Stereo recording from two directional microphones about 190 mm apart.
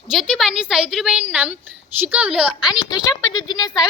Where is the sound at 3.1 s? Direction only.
20° left (ahead or behind).